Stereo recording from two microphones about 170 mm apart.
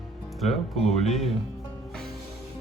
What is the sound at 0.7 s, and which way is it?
Speech, 40° left (ahead or behind).